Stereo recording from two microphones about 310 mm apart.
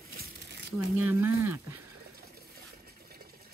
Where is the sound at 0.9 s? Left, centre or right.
Centre.